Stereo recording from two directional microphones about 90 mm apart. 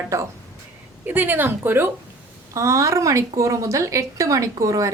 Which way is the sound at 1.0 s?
20° right (ahead or behind).